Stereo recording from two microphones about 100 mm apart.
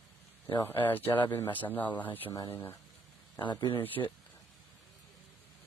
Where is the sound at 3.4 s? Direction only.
50° left (ahead or behind).